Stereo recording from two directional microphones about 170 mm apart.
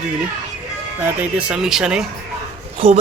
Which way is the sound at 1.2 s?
5° right (ahead or behind).